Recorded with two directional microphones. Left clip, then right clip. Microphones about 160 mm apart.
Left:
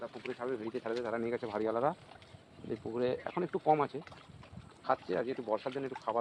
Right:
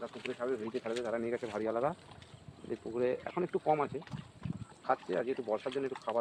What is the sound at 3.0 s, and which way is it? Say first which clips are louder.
Speech: right 1 dB; 45° left (ahead or behind).